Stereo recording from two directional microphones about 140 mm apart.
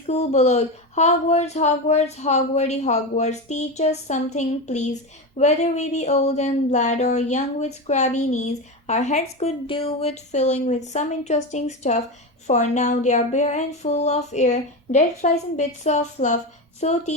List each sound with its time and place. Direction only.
0.1 s speech: 50° left (ahead or behind)